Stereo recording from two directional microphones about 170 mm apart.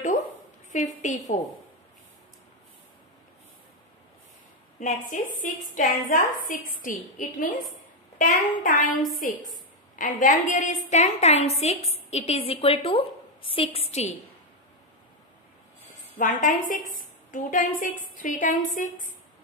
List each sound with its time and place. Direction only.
0.7 s a woman's voice: 45° left (ahead or behind)
4.7 s a woman's voice: 50° left (ahead or behind)
9.9 s a woman's voice: 50° left (ahead or behind)
16.2 s a woman's voice: 50° left (ahead or behind)